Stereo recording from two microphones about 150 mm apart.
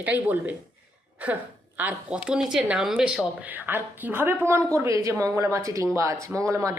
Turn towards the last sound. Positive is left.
turn(degrees=-20)  # may be behind; listen again after turning